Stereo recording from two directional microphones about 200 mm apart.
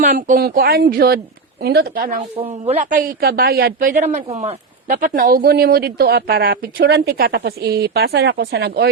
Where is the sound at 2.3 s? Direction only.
30° right (ahead or behind).